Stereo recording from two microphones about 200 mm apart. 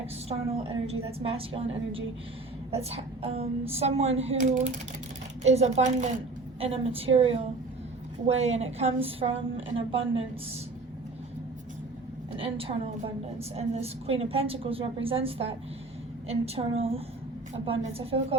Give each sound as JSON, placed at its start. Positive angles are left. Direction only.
{"t": 0.3, "sound": "a woman's voice", "side_deg": -30}
{"t": 12.4, "sound": "a woman's voice", "side_deg": -30}